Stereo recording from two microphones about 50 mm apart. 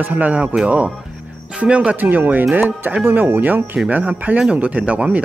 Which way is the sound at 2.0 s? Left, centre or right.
Right.